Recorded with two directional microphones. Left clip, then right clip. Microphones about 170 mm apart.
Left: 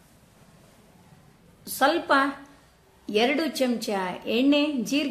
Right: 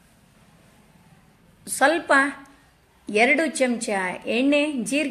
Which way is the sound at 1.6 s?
5° right (ahead or behind).